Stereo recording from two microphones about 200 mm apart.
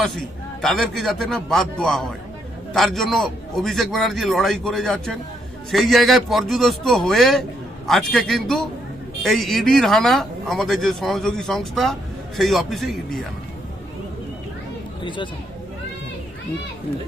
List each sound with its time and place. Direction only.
0.0 s speech: centre (ahead or behind)
15.0 s speech: 25° left (ahead or behind)